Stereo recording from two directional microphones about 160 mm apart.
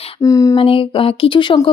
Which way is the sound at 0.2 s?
20° left (ahead or behind).